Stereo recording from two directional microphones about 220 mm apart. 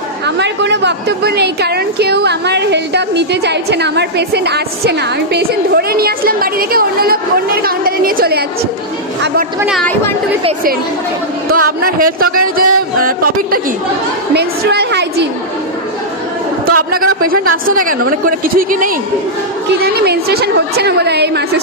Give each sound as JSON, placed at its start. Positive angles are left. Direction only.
{"t": 0.4, "sound": "a woman's voice", "side_deg": -50}
{"t": 9.6, "sound": "speech", "side_deg": 0}
{"t": 11.5, "sound": "a woman's voice", "side_deg": -40}
{"t": 16.6, "sound": "a woman's voice", "side_deg": -40}